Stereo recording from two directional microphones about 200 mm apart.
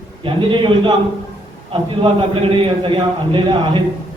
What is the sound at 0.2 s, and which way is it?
A man's voice, 25° right (ahead or behind).